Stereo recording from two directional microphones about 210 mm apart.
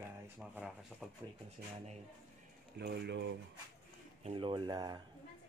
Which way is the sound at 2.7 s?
50° right (ahead or behind).